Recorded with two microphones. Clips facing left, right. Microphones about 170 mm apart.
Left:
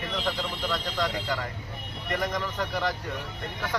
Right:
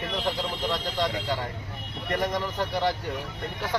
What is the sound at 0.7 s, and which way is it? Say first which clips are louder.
Speech: even; 30° right (ahead or behind).